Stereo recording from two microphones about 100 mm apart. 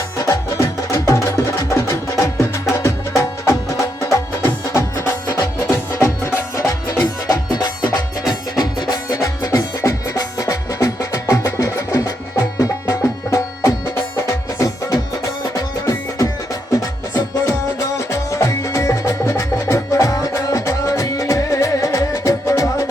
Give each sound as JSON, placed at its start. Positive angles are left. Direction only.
{"t": 0.2, "sound": "music", "side_deg": 30}
{"t": 8.3, "sound": "music", "side_deg": 40}